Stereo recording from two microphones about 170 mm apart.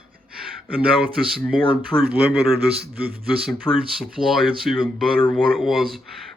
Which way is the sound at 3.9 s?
Centre (ahead or behind).